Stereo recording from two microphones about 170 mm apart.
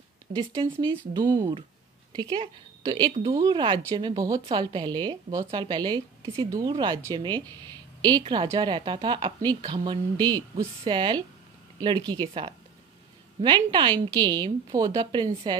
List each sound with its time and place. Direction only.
0.3 s speech: 65° right (ahead or behind)
1.1 s a woman's voice: 25° right (ahead or behind)